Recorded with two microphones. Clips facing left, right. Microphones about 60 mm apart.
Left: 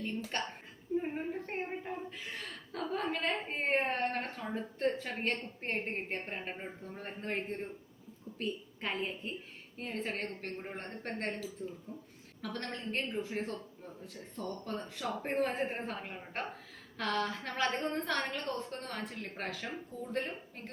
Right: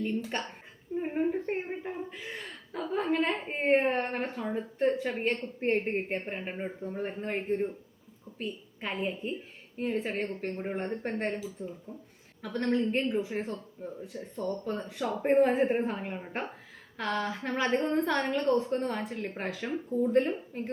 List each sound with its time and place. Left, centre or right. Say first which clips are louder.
0.0 s a woman's voice: right 5 dB; centre
1.0 s chuckle: right 8 dB; centre
4.5 s a woman's voice: right 5 dB; centre
19.9 s a woman's voice: right 14 dB; centre